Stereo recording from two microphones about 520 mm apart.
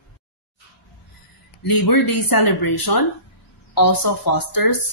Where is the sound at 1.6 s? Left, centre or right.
Left.